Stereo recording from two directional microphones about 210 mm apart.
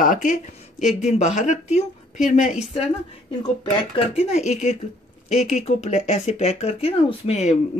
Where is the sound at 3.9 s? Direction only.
30° left (ahead or behind).